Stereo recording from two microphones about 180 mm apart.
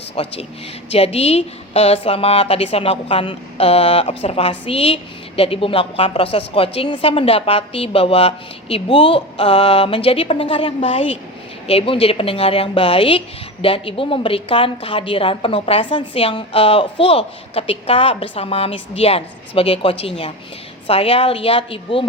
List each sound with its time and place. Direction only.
0.2 s speech: 30° left (ahead or behind)